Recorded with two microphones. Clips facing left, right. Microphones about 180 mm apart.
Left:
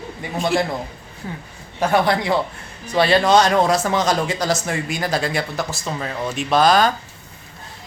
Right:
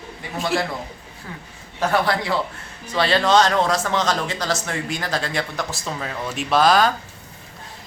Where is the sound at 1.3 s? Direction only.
25° left (ahead or behind); by 6.9 s centre (ahead or behind).